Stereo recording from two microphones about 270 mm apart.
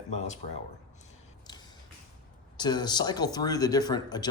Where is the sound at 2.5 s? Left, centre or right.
Centre.